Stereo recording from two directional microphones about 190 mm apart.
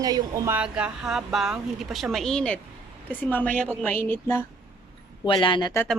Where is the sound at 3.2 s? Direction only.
10° left (ahead or behind).